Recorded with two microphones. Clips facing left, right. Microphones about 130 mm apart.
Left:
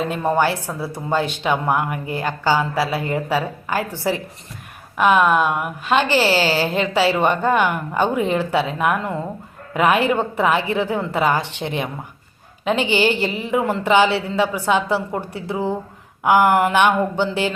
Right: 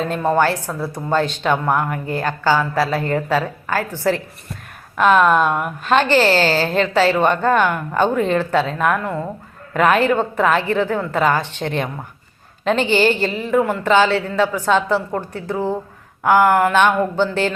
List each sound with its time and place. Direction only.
0.0 s a woman's voice: 10° left (ahead or behind)
4.9 s a woman's voice: 10° left (ahead or behind)